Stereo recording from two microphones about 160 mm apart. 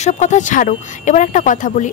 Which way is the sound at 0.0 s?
50° left (ahead or behind).